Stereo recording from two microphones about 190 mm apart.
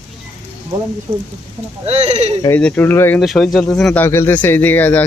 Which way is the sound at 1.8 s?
35° right (ahead or behind).